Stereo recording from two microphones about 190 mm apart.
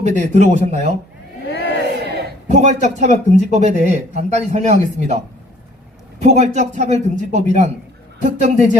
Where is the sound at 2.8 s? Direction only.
35° right (ahead or behind).